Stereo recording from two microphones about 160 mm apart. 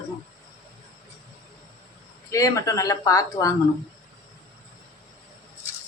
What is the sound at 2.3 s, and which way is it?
Speech, 20° left (ahead or behind).